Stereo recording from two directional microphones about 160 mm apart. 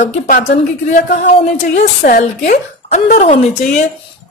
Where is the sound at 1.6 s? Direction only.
55° left (ahead or behind).